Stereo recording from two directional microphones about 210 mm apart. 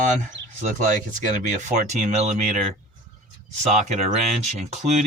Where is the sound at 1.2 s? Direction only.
35° right (ahead or behind).